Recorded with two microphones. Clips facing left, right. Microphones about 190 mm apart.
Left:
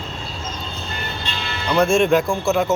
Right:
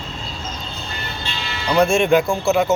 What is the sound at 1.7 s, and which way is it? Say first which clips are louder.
Speech: right 1 dB; centre (ahead or behind).